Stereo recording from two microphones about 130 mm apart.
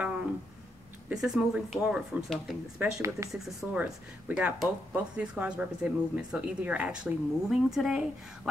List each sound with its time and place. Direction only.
1.0 s speech: 5° right (ahead or behind)
2.8 s speech: 20° right (ahead or behind)
3.3 s speech: centre (ahead or behind)